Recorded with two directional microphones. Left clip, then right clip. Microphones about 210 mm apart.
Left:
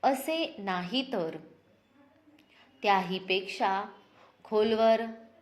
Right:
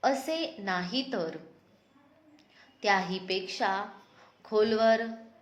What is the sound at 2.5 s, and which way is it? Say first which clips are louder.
A woman's voice: left 1 dB; 20° left (ahead or behind).